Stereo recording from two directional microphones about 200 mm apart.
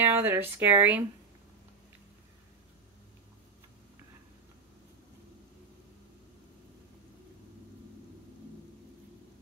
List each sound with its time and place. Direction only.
0.0 s speech: 10° right (ahead or behind)